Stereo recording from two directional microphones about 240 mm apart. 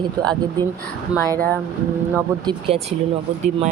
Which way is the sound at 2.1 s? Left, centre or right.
Right.